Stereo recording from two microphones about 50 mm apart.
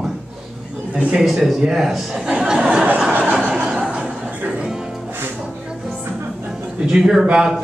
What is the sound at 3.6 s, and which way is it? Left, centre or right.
Chuckle, centre.